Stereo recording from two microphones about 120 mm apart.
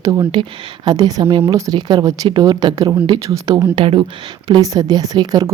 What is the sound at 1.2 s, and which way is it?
Speech, 50° right (ahead or behind).